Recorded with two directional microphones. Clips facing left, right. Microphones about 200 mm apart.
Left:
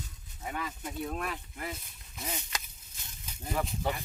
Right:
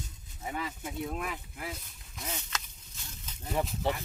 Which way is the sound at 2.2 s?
10° left (ahead or behind).